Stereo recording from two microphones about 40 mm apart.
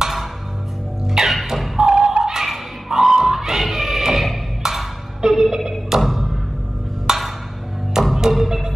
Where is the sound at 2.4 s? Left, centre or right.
Centre.